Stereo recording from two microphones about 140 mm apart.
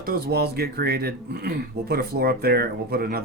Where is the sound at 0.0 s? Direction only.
90° right.